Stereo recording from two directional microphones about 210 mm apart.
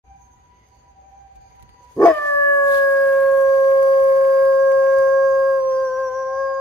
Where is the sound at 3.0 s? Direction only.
5° left (ahead or behind).